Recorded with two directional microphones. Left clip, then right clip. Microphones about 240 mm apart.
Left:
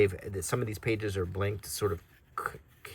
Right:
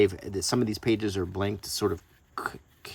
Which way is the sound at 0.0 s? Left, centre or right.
Centre.